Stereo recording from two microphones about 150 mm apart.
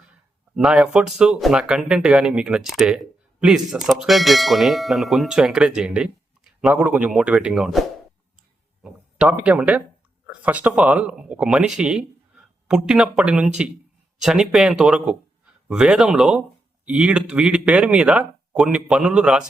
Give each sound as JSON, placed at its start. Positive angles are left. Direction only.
{"t": 0.5, "sound": "speech", "side_deg": -5}